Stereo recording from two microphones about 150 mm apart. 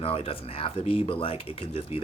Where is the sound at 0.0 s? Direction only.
40° left (ahead or behind).